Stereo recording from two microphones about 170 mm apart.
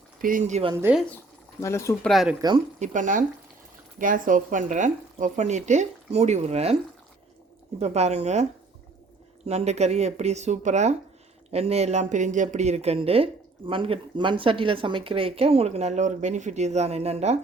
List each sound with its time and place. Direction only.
0.2 s speech: 50° right (ahead or behind)
0.9 s speech: 10° right (ahead or behind)
1.6 s speech: 15° left (ahead or behind)
2.0 s speech: centre (ahead or behind)
2.7 s speech: 45° right (ahead or behind)
7.8 s speech: 40° right (ahead or behind)
9.5 s speech: 40° right (ahead or behind)